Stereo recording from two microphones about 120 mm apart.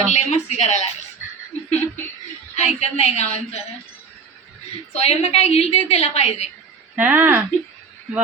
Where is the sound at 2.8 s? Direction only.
65° left (ahead or behind).